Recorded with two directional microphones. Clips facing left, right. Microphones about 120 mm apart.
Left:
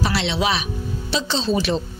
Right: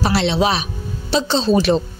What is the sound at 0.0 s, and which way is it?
A woman's voice, 40° right (ahead or behind).